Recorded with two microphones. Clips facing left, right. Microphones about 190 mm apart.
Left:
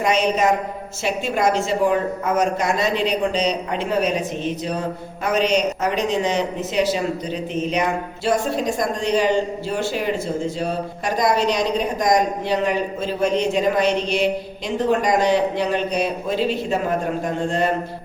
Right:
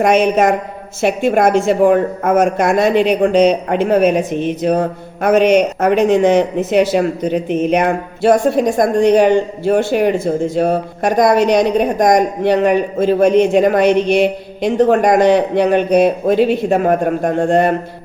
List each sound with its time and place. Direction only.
0.0 s speech: 55° right (ahead or behind)